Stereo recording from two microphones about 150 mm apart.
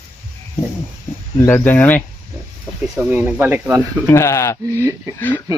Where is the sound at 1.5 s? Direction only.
15° left (ahead or behind).